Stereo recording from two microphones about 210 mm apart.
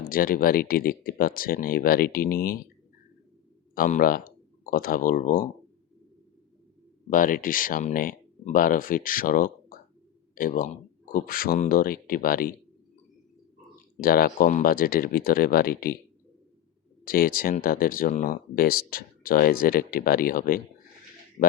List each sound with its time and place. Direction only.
0.0 s speech: 45° left (ahead or behind)
3.8 s speech: 40° left (ahead or behind)
7.1 s speech: 40° left (ahead or behind)
13.9 s speech: 45° left (ahead or behind)
17.1 s speech: 45° left (ahead or behind)